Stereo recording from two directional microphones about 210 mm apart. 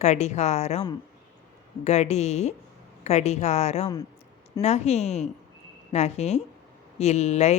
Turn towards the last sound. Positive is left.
turn(degrees=30)  # may be behind; listen again after turning